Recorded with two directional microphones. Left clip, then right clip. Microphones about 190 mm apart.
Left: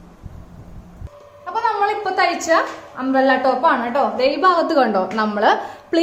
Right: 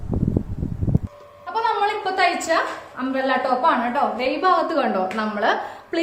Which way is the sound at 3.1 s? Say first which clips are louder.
Left 5 dB; 40° left (ahead or behind).